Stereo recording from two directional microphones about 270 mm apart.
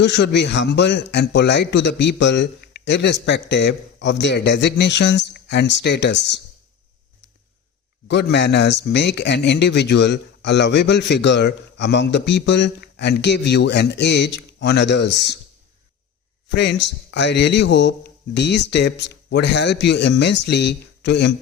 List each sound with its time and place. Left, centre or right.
0.0 s speech: left
8.0 s speech: left
16.6 s speech: left